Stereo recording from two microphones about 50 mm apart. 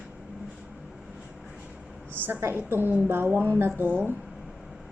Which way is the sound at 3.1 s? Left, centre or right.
Right.